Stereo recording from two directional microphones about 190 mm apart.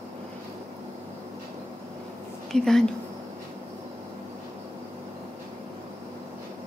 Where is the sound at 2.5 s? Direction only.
5° left (ahead or behind).